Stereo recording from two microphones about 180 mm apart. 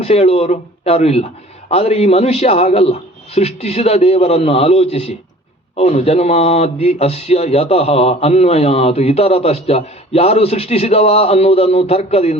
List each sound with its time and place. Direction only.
0.0 s speech: 35° left (ahead or behind)